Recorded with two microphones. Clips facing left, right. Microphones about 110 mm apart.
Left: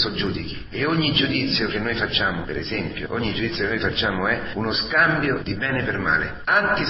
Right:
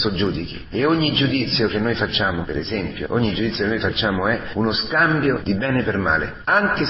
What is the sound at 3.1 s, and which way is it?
A man's voice, 25° right (ahead or behind).